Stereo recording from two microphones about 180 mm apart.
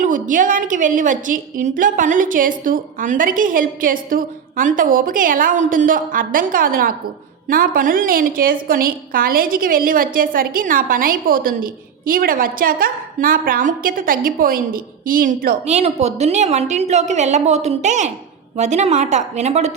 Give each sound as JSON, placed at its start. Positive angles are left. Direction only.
{"t": 0.0, "sound": "a woman's voice", "side_deg": -45}